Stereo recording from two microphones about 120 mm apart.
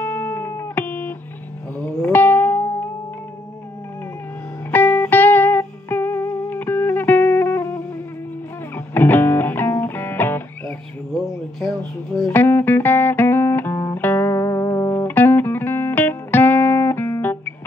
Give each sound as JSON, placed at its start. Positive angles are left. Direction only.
{"t": 0.0, "sound": "music", "side_deg": 15}
{"t": 4.6, "sound": "music", "side_deg": 15}
{"t": 8.7, "sound": "music", "side_deg": 15}
{"t": 12.3, "sound": "music", "side_deg": 15}